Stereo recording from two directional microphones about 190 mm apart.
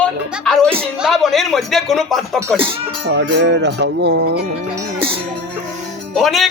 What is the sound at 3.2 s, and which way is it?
Music, 70° right (ahead or behind).